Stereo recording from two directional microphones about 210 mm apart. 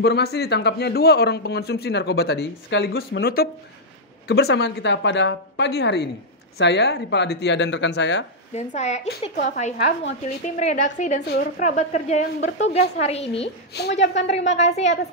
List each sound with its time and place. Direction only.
0.0 s a man's voice: 50° left (ahead or behind)
8.5 s speech: 35° left (ahead or behind)
11.2 s a man's voice: 45° left (ahead or behind)
11.7 s a woman's voice: 35° left (ahead or behind)
13.7 s a man's voice: 50° left (ahead or behind)
14.2 s speech: 30° left (ahead or behind)